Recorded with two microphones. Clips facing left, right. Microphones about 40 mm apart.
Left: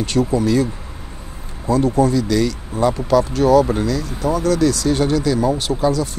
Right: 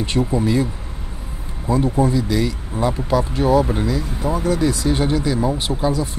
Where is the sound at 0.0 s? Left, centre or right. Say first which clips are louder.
Left 2 dB; right.